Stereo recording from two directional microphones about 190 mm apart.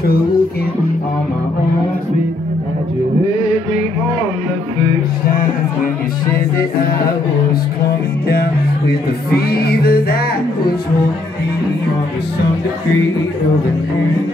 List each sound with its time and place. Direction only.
9.5 s music: 55° left (ahead or behind)